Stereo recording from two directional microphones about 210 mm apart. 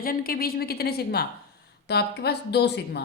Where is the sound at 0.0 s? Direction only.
45° left (ahead or behind).